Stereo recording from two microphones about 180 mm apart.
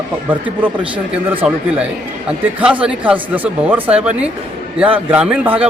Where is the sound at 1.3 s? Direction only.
5° right (ahead or behind).